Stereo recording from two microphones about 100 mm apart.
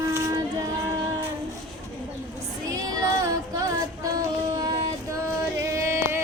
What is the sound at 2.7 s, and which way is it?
Female singing, 35° right (ahead or behind).